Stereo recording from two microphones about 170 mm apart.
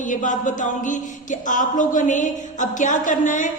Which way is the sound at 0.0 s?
50° left (ahead or behind).